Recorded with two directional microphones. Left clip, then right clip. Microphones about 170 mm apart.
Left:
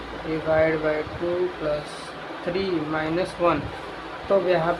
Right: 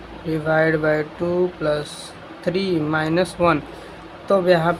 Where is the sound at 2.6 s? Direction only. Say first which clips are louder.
Right 4 dB; 35° right (ahead or behind).